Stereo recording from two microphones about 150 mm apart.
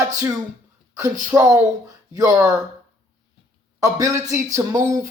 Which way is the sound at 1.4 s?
20° right (ahead or behind).